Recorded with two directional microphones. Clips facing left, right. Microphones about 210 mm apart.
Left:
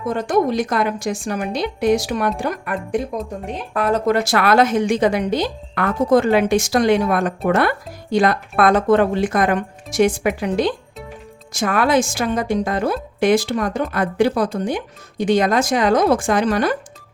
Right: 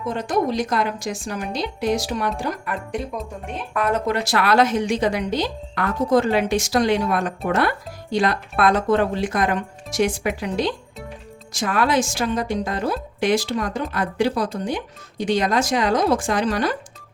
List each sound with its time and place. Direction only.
0.1 s a woman's voice: 50° left (ahead or behind)
3.4 s a woman's voice: 35° left (ahead or behind); by 16.7 s 55° left (ahead or behind)